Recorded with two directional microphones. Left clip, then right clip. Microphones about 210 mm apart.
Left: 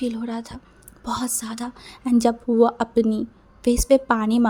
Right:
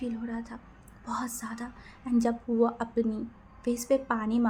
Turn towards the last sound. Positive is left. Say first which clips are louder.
# left 9 dB
turn(degrees=45)  # may be behind; listen again after turning